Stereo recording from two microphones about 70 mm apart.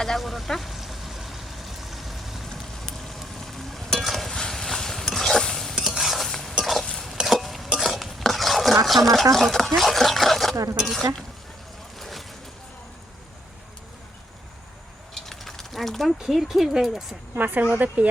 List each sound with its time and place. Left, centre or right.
0.0 s vehicle: centre
5.7 s stir: centre
8.9 s speech: centre
10.5 s speech: right
11.9 s boat: centre
15.1 s speech: centre
17.3 s speech: right